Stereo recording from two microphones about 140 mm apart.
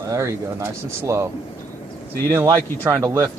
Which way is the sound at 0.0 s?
25° right (ahead or behind).